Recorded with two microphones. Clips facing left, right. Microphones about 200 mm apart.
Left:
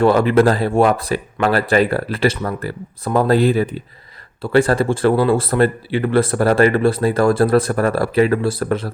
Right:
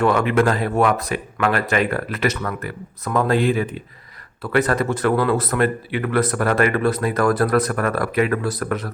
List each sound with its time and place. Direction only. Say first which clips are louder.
0.0 s speech: left 4 dB; 35° left (ahead or behind)